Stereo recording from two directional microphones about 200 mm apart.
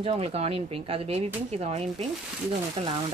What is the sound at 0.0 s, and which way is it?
Speech, 30° right (ahead or behind).